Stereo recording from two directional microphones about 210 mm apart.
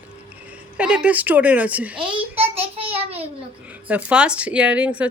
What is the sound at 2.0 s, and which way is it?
A child's voice, 25° right (ahead or behind).